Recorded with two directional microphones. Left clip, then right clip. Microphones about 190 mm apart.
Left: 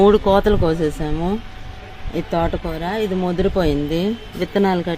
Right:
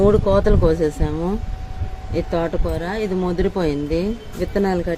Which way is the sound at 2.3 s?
50° left (ahead or behind).